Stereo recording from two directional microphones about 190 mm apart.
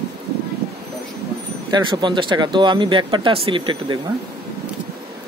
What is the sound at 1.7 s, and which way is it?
Speech, 25° right (ahead or behind).